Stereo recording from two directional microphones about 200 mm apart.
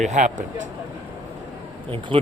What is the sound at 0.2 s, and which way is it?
Speech, 40° right (ahead or behind).